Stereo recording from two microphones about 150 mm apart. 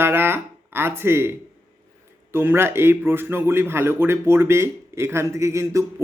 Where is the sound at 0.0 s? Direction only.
15° right (ahead or behind).